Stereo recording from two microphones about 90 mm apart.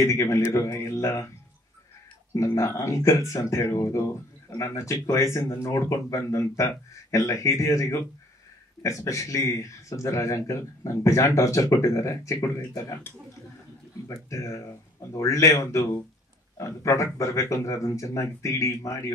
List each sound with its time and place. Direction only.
0.0 s speech: 35° left (ahead or behind)
2.3 s speech: 35° left (ahead or behind)
14.0 s speech: 35° left (ahead or behind)